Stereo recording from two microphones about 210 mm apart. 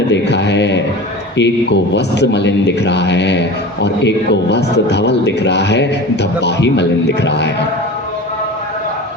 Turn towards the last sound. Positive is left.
turn(degrees=55)  # may be behind; listen again after turning